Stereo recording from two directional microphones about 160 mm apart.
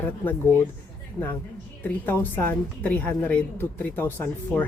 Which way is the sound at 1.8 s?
15° left (ahead or behind).